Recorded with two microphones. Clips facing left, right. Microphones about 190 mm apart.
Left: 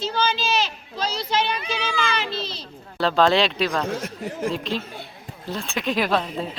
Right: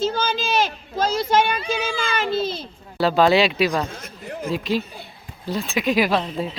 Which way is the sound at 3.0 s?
10° right (ahead or behind).